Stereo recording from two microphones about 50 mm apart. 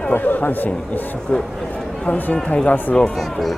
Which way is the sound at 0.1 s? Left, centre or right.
Left.